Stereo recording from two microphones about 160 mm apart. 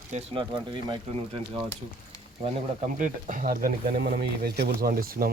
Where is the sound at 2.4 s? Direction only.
50° right (ahead or behind); by 5.3 s 70° right (ahead or behind).